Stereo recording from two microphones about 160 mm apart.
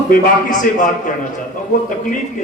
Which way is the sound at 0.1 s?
60° left (ahead or behind).